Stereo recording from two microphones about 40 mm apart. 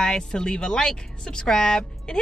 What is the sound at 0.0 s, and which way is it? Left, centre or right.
A woman's voice, centre.